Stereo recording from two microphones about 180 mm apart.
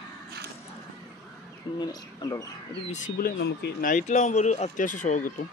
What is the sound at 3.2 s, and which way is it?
Speech, 65° left (ahead or behind).